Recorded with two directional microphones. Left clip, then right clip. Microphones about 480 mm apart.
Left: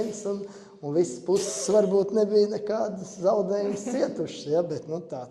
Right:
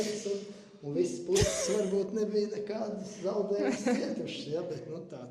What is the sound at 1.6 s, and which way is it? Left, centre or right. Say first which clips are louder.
Speech: left 9 dB; left.